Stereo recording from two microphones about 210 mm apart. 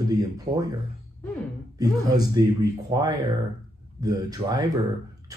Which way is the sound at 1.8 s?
20° right (ahead or behind).